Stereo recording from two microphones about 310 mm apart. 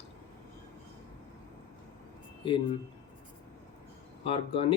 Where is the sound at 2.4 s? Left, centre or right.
Centre.